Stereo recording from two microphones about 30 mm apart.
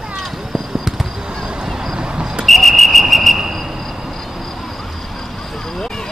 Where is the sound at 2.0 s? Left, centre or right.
Right.